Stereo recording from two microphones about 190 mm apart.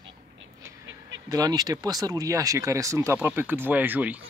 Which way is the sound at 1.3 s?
20° right (ahead or behind).